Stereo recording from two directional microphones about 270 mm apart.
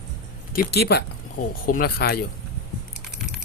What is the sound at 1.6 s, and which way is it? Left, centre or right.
Speech, left.